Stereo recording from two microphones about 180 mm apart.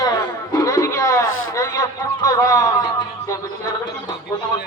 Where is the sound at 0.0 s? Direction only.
20° left (ahead or behind).